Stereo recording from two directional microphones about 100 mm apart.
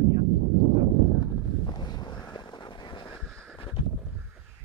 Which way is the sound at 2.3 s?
50° left (ahead or behind).